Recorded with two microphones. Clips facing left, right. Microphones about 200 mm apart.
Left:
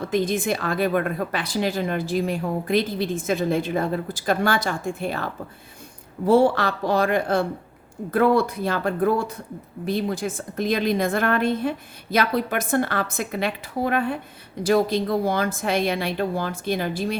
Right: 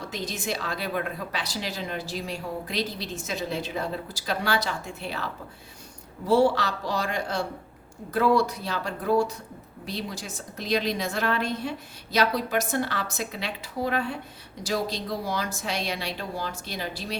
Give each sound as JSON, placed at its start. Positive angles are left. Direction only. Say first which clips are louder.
{"t": 0.1, "sound": "a woman's voice", "louder": "left 10 dB", "side_deg": 55}